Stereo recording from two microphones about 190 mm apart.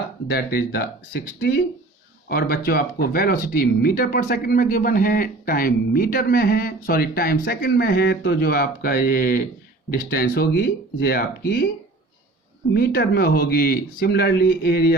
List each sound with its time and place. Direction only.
0.3 s speech: 55° left (ahead or behind)
2.3 s speech: 50° left (ahead or behind)
10.2 s speech: 65° left (ahead or behind)
12.7 s speech: 55° left (ahead or behind)